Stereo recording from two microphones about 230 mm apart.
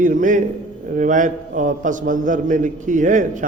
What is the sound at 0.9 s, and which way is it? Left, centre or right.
A man's voice, right.